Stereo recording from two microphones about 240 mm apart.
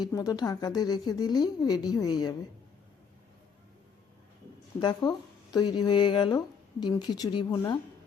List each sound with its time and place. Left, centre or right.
0.0 s a woman's voice: centre
4.8 s a woman's voice: centre